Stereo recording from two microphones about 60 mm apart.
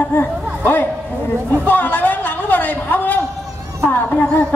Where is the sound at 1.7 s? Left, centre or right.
Left.